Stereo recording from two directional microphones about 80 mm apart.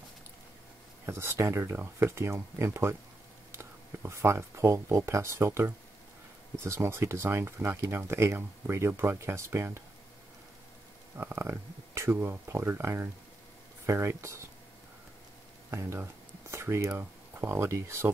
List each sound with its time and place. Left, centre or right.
1.0 s speech: right
11.1 s speech: right
15.7 s speech: right